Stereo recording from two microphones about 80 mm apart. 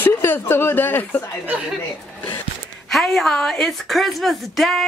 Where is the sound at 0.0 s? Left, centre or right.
Left.